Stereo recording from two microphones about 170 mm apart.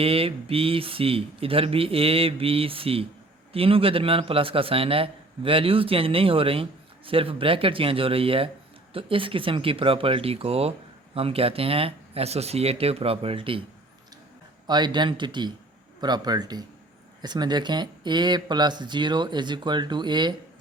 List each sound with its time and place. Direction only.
0.0 s a man's voice: 35° right (ahead or behind)
14.7 s speech: 25° right (ahead or behind)